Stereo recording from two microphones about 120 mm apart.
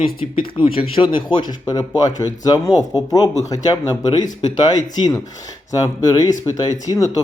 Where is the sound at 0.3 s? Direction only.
50° left (ahead or behind).